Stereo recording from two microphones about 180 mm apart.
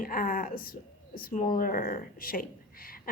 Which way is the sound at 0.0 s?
50° left (ahead or behind).